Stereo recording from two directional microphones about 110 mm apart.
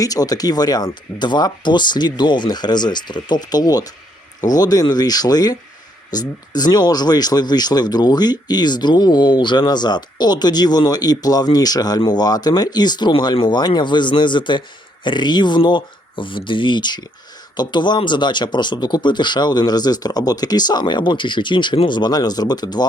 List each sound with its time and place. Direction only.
0.0 s speech: 35° left (ahead or behind)